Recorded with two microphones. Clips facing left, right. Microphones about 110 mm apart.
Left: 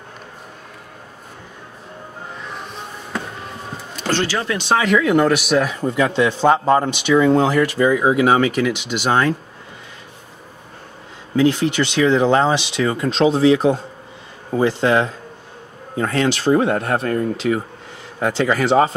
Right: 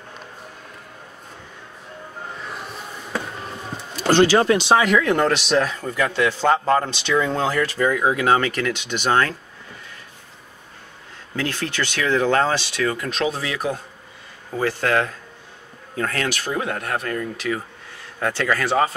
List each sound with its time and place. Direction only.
4.0 s speech: 15° right (ahead or behind)
4.6 s speech: 5° right (ahead or behind); by 9.3 s 15° left (ahead or behind)
11.3 s speech: 15° left (ahead or behind)